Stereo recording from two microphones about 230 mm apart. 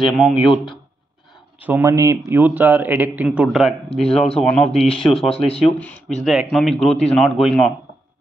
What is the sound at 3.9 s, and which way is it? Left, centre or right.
Speech, left.